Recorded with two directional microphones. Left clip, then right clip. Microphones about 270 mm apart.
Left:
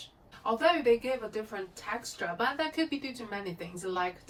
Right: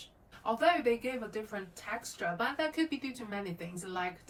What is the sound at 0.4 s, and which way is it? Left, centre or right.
Speech, centre.